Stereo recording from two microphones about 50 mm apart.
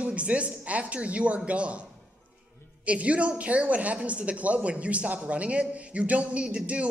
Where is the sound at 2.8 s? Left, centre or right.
Right.